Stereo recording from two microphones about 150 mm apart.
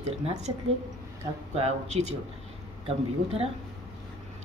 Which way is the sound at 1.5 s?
45° right (ahead or behind).